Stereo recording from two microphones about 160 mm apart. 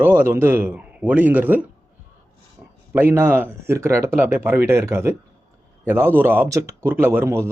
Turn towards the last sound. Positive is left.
turn(degrees=-15)  # may be behind; listen again after turning